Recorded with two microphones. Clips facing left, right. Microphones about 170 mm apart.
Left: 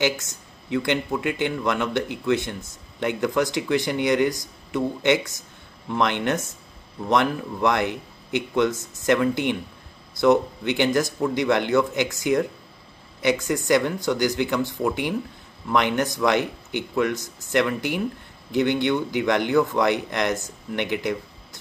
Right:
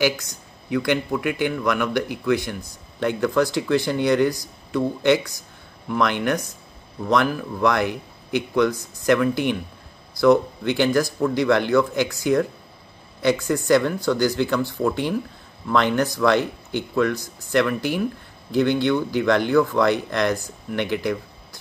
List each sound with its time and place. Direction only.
0.0 s speech: 25° left (ahead or behind)